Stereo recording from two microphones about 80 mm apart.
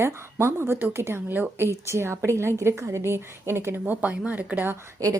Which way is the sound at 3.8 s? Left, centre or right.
Centre.